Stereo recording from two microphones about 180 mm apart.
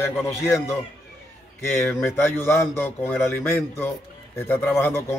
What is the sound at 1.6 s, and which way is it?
Speech, 15° left (ahead or behind).